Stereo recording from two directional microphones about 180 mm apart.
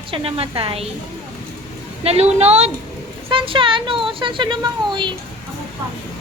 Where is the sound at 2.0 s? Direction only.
35° right (ahead or behind).